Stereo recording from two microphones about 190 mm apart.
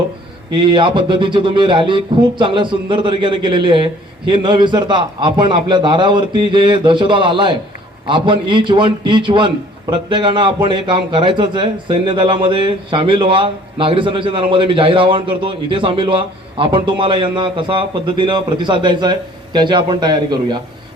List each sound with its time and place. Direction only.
0.5 s a man's voice: 25° right (ahead or behind)